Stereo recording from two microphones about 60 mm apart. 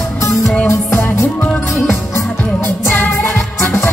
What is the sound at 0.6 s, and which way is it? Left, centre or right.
Music, left.